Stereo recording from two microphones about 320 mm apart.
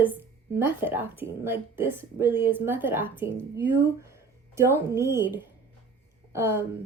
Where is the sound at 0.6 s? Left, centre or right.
Centre.